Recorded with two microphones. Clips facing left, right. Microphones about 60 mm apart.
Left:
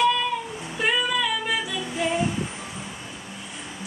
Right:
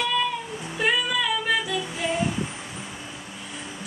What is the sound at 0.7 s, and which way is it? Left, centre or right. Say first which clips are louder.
Female singing: even; centre.